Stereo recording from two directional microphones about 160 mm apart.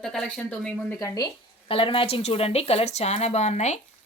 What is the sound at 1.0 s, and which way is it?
Speech, 20° left (ahead or behind).